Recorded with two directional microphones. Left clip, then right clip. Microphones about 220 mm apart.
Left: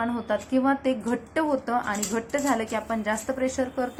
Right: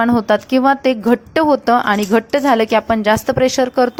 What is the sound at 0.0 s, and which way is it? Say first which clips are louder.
Speech: right 13 dB; 40° right (ahead or behind).